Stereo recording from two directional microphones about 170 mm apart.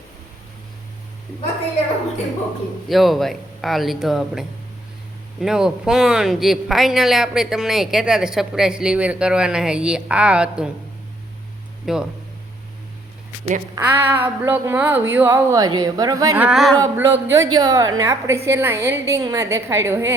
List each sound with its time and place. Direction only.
2.9 s speech: centre (ahead or behind)
11.9 s speech: centre (ahead or behind)
13.7 s a woman's voice: 15° right (ahead or behind)
16.4 s speech: 5° right (ahead or behind)
16.8 s a woman's voice: 15° right (ahead or behind)